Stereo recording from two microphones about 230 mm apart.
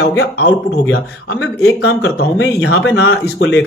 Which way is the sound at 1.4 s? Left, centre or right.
Left.